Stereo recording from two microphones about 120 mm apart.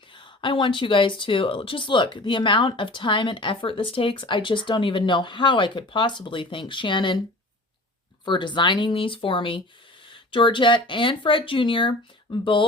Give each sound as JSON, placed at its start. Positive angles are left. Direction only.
{"t": 0.1, "sound": "speech", "side_deg": 45}
{"t": 8.2, "sound": "speech", "side_deg": 40}